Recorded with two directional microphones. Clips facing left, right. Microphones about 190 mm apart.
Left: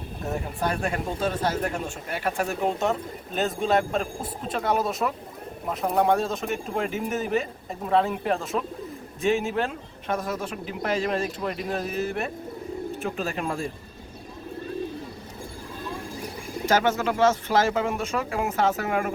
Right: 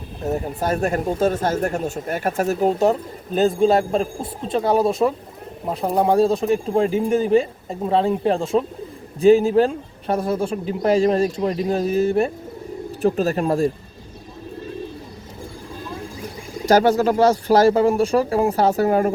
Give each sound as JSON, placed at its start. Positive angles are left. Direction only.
{"t": 0.3, "sound": "speech", "side_deg": -35}
{"t": 16.6, "sound": "speech", "side_deg": -35}